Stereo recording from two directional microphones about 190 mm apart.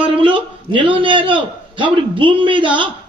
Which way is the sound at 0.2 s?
25° right (ahead or behind).